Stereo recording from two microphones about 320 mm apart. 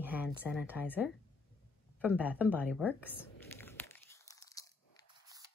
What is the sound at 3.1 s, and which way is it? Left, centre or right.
Crumpling, centre.